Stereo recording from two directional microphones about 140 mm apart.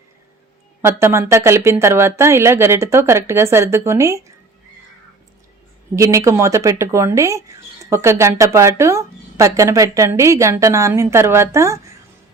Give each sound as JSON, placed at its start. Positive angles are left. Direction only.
{"t": 0.8, "sound": "speech", "side_deg": -20}
{"t": 6.0, "sound": "speech", "side_deg": -20}